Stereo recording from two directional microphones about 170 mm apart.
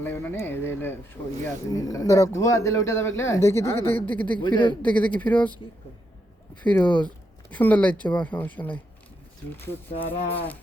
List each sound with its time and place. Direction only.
0.0 s speech: 10° left (ahead or behind)
4.4 s speech: 30° left (ahead or behind)
4.8 s speech: 10° left (ahead or behind)
6.6 s speech: 10° left (ahead or behind)
10.1 s speech: 10° left (ahead or behind)